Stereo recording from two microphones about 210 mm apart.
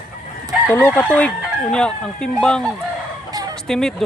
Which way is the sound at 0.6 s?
10° left (ahead or behind).